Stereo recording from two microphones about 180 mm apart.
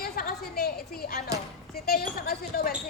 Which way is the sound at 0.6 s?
55° left (ahead or behind).